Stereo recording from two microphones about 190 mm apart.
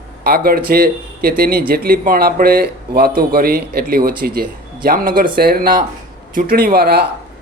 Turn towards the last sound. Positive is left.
turn(degrees=-55)  # may be behind; listen again after turning